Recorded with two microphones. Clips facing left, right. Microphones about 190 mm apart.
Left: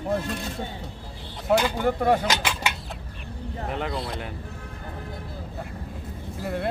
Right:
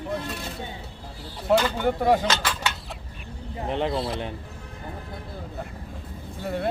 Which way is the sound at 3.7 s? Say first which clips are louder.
Right 5 dB; 30° right (ahead or behind).